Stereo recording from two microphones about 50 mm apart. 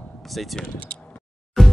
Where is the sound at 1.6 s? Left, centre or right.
Centre.